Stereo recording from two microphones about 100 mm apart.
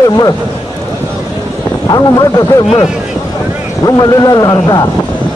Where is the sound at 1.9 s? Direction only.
40° left (ahead or behind).